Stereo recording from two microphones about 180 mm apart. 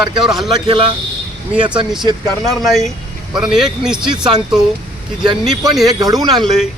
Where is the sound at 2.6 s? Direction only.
Centre (ahead or behind).